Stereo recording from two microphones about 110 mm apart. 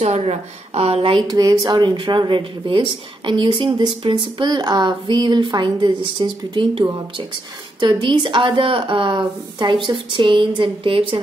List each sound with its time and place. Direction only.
0.0 s a woman's voice: 75° right (ahead or behind); by 1.2 s 55° right (ahead or behind)
1.3 s speech: 35° right (ahead or behind); by 11.1 s 50° right (ahead or behind)